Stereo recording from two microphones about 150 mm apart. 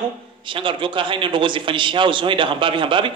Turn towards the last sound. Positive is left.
turn(degrees=-35)  # may be behind; listen again after turning